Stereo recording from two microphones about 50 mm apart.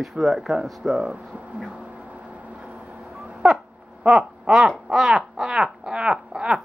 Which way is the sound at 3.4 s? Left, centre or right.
Centre.